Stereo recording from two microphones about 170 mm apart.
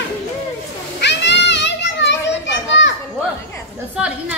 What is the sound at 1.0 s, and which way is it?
Children playing, 90° left.